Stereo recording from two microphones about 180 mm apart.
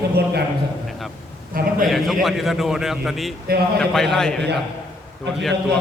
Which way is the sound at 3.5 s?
55° right (ahead or behind).